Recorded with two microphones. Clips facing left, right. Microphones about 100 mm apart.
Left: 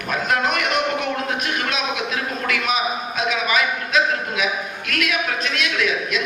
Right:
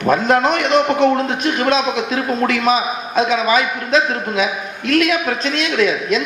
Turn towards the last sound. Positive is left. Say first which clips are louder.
# right 6 dB
turn(degrees=-30)  # may be behind; listen again after turning